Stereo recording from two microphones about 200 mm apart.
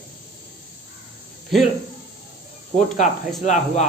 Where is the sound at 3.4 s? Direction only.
35° left (ahead or behind).